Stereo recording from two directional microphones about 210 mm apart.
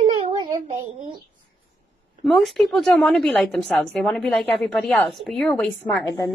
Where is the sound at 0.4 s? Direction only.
25° right (ahead or behind).